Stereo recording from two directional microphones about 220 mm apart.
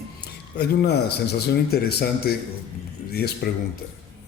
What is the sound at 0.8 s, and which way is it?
A man's voice, 50° left (ahead or behind).